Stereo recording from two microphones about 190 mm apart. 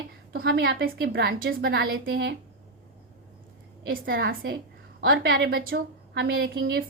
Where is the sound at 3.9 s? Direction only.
50° right (ahead or behind).